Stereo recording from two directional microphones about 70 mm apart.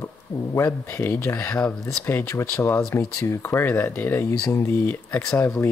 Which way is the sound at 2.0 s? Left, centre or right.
Left.